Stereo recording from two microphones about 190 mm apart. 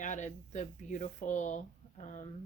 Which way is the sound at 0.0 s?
40° left (ahead or behind).